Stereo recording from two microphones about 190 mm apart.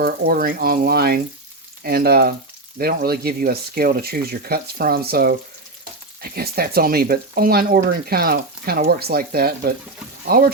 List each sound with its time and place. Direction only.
0.0 s speech: 50° right (ahead or behind)